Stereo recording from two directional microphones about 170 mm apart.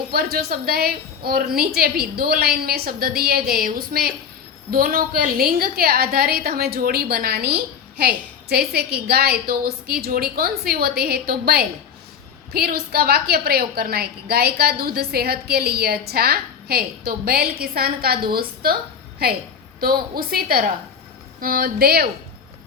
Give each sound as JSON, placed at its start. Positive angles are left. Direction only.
{"t": 0.1, "sound": "a woman's voice", "side_deg": -60}